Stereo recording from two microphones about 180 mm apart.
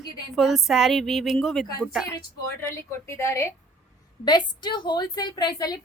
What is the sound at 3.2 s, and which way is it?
A woman's voice, 15° left (ahead or behind).